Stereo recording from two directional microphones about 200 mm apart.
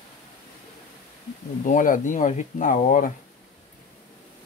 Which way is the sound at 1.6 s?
40° left (ahead or behind).